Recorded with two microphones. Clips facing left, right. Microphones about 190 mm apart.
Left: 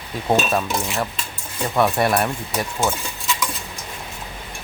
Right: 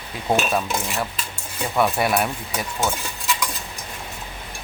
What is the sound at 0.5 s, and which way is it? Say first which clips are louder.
Speech: left 2 dB; centre (ahead or behind).